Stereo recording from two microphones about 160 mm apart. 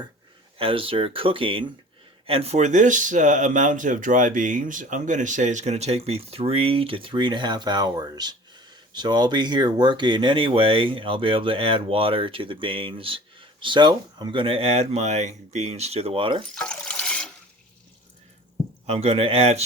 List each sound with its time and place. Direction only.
0.6 s speech: 35° right (ahead or behind)
16.6 s ratchet: 5° left (ahead or behind)
18.9 s speech: 40° right (ahead or behind)